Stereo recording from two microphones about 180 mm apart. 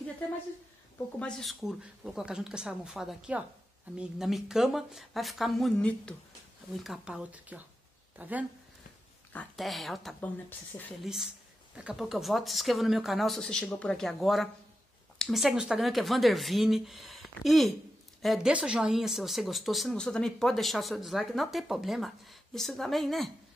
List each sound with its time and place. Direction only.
1.2 s speech: centre (ahead or behind)
9.3 s speech: 5° left (ahead or behind)
10.7 s a woman's voice: 20° left (ahead or behind)
11.7 s speech: 5° right (ahead or behind)